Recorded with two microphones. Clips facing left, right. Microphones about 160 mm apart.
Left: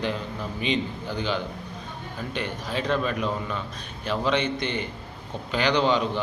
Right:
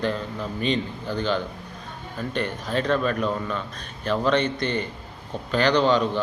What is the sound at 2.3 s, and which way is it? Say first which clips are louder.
Speech: right 4 dB; 50° right (ahead or behind).